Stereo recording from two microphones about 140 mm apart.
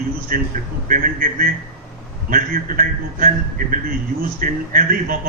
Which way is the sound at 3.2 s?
85° right.